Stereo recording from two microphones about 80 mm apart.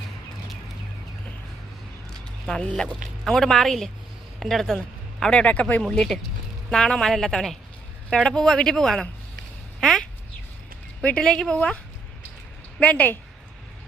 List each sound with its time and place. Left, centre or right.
2.5 s a man's voice: centre
5.2 s a man's voice: centre
5.8 s a man's voice: centre
12.8 s a woman's voice: centre